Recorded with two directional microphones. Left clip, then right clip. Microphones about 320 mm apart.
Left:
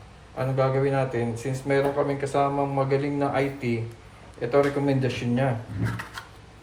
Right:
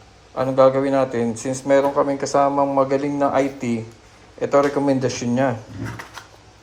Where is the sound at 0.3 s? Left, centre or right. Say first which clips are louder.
Right 9 dB; centre.